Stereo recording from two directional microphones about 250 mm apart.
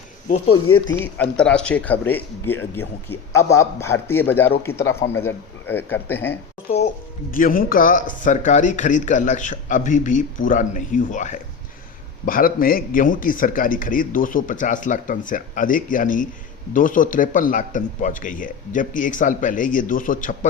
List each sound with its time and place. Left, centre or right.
0.3 s speech: left
1.0 s speech: centre
7.3 s a man's voice: left